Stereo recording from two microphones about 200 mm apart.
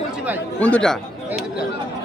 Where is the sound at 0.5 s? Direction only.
5° left (ahead or behind).